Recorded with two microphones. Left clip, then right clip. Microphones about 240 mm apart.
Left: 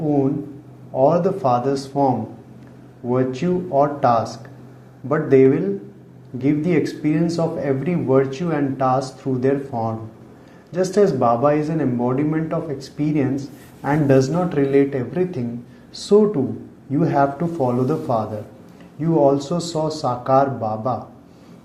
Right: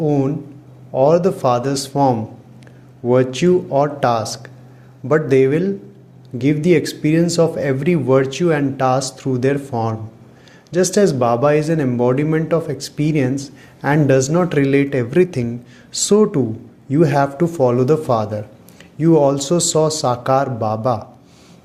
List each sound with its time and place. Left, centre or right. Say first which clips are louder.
0.9 s speech: right 3 dB; right
3.1 s speech: right 7 dB; right